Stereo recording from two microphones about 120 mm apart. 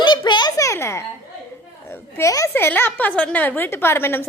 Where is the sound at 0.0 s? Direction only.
40° left (ahead or behind); by 1.0 s 25° left (ahead or behind).